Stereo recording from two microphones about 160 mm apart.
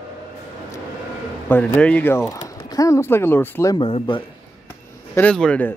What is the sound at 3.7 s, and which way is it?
Speech, 35° left (ahead or behind).